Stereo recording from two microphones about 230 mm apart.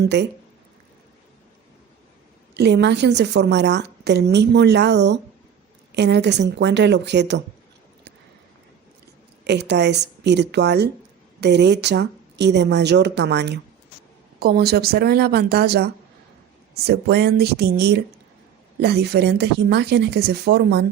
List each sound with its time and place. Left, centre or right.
0.0 s a woman's voice: right
2.6 s a woman's voice: right
9.4 s a woman's voice: right